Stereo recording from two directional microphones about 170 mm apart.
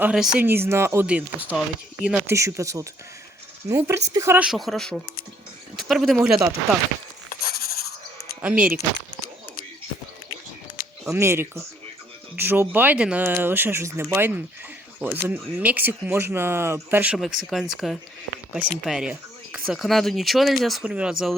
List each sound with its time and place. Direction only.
0.0 s speech: 5° right (ahead or behind)
7.4 s a sound: 60° left (ahead or behind)
8.4 s speech: 10° right (ahead or behind)
10.8 s music: 55° left (ahead or behind)
11.1 s speech: 15° right (ahead or behind)